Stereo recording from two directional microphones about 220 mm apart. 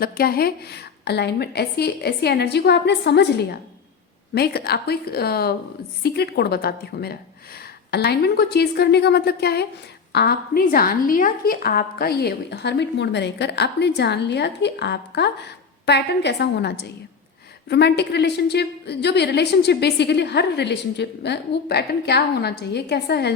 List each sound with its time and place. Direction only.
0.0 s a woman's voice: 45° left (ahead or behind)